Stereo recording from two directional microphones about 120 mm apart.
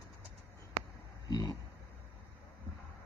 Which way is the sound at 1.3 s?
30° left (ahead or behind).